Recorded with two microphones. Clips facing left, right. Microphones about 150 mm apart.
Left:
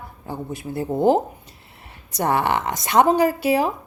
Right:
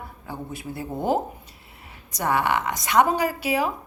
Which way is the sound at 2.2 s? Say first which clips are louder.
Left 2 dB; 30° left (ahead or behind).